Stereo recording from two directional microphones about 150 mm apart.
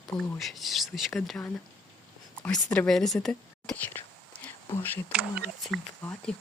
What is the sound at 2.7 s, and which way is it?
A woman's voice, 5° left (ahead or behind).